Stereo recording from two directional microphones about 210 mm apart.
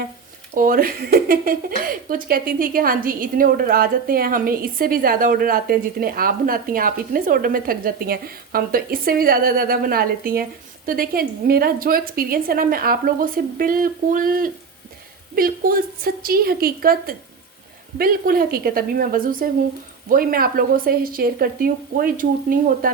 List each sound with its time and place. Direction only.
0.5 s speech: 40° right (ahead or behind)